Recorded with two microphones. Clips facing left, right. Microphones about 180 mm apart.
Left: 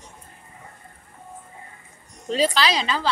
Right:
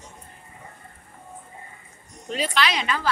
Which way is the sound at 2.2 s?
35° left (ahead or behind).